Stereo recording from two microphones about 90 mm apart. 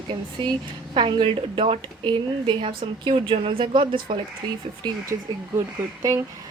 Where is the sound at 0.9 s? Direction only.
85° right.